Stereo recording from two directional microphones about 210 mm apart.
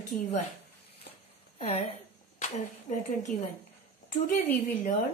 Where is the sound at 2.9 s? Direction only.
35° left (ahead or behind).